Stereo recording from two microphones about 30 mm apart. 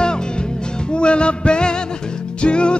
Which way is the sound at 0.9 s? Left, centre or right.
Left.